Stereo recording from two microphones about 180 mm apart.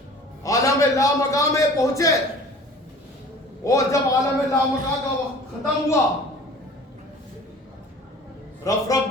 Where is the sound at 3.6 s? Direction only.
20° left (ahead or behind).